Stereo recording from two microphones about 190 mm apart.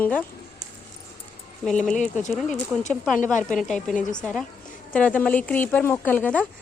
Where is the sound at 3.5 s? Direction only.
5° left (ahead or behind).